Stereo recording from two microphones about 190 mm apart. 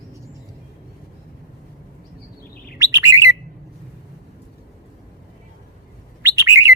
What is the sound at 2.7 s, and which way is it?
Bird, 15° right (ahead or behind).